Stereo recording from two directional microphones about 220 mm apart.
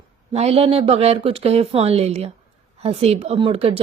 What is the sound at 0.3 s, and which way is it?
A woman's voice, 25° right (ahead or behind).